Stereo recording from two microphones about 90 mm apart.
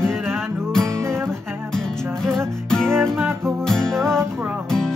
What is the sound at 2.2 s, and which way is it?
Music, 5° left (ahead or behind).